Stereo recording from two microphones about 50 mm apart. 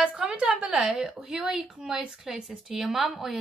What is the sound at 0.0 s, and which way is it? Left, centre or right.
Speech, centre.